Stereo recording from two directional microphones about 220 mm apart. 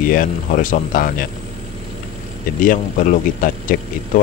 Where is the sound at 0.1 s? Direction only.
35° left (ahead or behind).